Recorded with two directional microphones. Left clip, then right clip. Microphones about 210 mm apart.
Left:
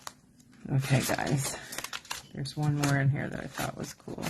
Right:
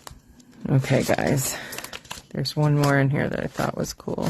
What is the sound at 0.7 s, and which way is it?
Speech, 55° right (ahead or behind).